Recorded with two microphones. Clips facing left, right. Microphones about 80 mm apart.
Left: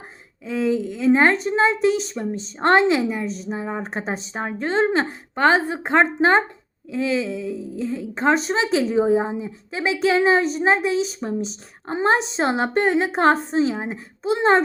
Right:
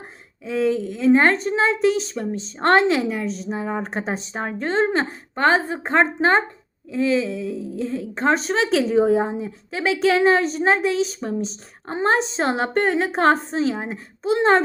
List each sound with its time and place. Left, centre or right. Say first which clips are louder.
0.4 s a woman's voice: right 1 dB; centre
7.4 s a sound: right 1 dB; right
7.9 s a woman's voice: left 1 dB; centre